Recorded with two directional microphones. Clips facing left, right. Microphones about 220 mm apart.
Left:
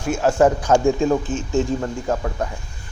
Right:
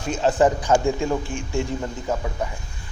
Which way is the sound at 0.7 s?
20° left (ahead or behind).